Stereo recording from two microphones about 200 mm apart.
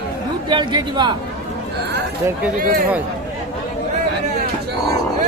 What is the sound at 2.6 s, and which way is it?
Speech, 45° right (ahead or behind).